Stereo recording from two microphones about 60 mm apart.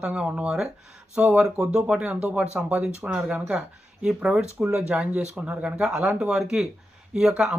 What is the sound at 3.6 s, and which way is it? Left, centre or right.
Speech, centre.